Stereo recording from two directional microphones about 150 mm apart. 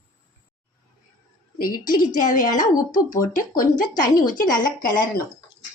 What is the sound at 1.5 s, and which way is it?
A woman's voice, 70° left (ahead or behind).